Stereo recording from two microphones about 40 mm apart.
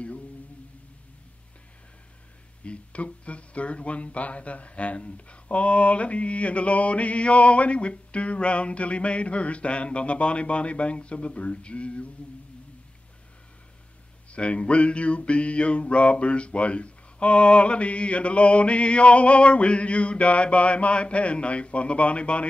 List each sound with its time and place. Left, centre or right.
2.6 s speech: left
14.3 s speech: left